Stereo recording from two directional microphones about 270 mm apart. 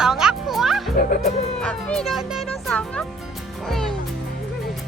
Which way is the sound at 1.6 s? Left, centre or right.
Centre.